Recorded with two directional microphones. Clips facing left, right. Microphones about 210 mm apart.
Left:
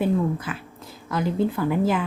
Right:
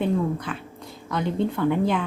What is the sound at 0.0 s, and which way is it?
A woman's voice, 5° left (ahead or behind).